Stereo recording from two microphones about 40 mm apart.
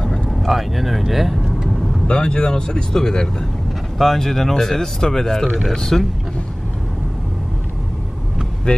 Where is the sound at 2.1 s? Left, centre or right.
Left.